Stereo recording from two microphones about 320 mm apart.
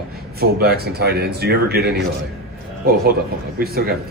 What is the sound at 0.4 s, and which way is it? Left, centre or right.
A man's voice, right.